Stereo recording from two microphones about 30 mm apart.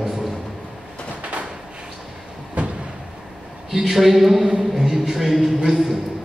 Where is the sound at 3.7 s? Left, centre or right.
Centre.